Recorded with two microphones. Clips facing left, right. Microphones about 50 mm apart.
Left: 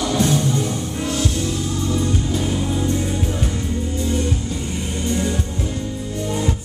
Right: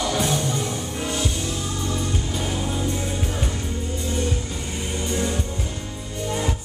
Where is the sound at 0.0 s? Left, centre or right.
Centre.